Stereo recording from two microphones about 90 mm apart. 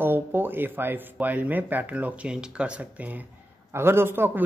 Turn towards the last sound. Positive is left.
turn(degrees=-25)  # may be behind; listen again after turning